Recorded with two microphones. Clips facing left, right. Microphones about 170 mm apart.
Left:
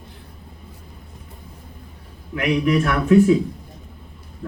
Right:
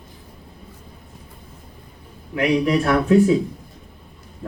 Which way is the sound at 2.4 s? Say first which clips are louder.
Right 1 dB; 30° right (ahead or behind).